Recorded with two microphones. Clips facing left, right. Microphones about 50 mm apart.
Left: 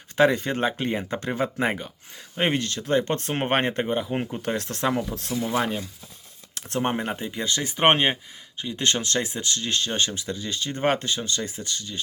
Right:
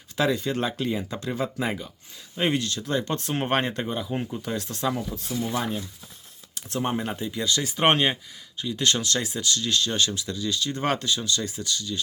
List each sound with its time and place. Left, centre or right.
0.2 s speech: left
0.5 s speech: left
5.1 s speech: left
6.5 s speech: left